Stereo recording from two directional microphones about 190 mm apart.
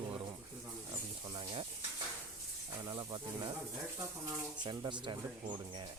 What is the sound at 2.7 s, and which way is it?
Speech, 20° right (ahead or behind).